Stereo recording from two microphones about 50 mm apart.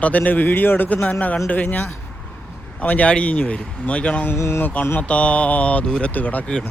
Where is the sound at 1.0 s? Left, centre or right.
Left.